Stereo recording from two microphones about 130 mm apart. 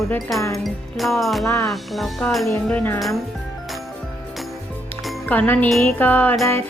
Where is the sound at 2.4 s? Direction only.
15° left (ahead or behind).